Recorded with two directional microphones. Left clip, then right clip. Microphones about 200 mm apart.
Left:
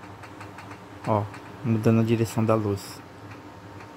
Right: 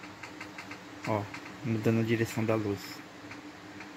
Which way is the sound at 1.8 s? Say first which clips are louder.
Left 5 dB; 20° left (ahead or behind).